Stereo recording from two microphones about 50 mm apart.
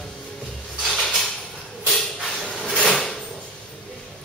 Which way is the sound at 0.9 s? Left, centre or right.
Centre.